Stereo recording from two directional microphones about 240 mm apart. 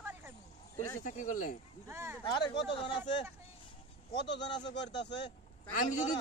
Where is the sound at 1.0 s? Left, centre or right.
Left.